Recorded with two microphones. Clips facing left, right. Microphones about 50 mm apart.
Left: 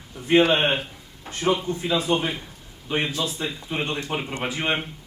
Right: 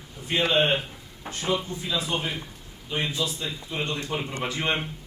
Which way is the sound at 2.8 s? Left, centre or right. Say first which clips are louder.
Left 3 dB; left.